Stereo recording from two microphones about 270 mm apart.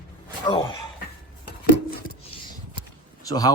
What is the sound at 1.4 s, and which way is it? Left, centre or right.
Rub, left.